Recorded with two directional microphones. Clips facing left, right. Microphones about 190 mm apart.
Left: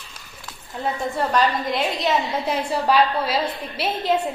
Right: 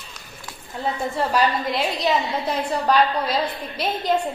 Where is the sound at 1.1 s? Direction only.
5° right (ahead or behind).